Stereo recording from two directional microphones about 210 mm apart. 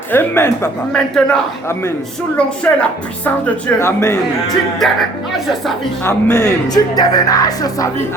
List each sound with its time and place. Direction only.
0.1 s a man's voice: 10° left (ahead or behind)
6.1 s speech: 15° left (ahead or behind)